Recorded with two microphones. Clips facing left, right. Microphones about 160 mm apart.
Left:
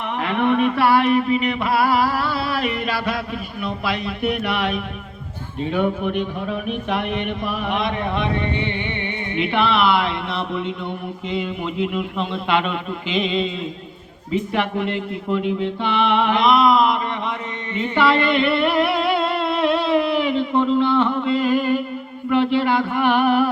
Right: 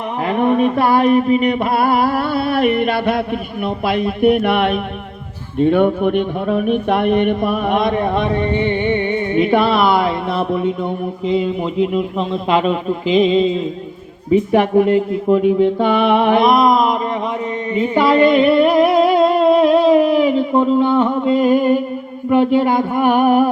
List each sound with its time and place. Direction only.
0.3 s speech: 40° right (ahead or behind)
17.9 s music: 40° right (ahead or behind)
22.3 s speech: 45° right (ahead or behind)